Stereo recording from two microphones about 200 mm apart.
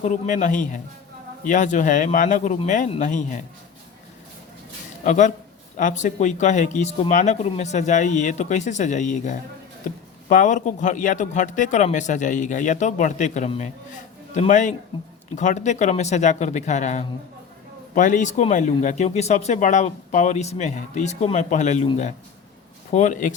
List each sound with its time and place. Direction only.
0.0 s speech: 40° left (ahead or behind)
5.0 s speech: 40° left (ahead or behind)